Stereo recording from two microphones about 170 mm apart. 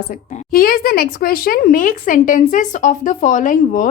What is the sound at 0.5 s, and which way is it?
Speech, 60° left (ahead or behind).